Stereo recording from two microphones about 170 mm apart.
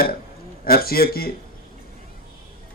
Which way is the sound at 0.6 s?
60° left (ahead or behind).